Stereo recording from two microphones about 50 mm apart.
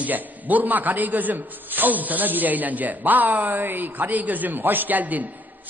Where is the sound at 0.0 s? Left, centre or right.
Right.